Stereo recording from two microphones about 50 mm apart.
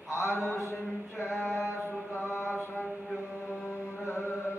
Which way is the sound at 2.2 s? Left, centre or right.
Left.